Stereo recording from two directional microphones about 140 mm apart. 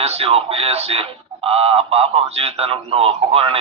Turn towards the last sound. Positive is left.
turn(degrees=-45)  # may be behind; listen again after turning